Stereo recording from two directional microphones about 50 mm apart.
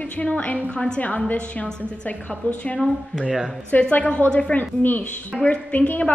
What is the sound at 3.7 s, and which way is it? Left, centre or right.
Speech, left.